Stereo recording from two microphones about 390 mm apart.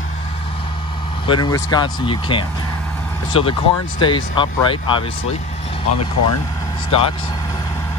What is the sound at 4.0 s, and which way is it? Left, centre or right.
Speech, centre.